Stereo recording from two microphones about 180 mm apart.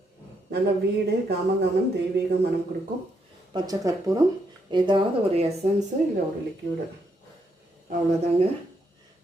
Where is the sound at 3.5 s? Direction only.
20° right (ahead or behind).